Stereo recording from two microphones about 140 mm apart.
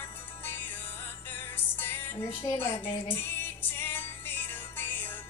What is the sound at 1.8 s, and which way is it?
Music, 15° left (ahead or behind).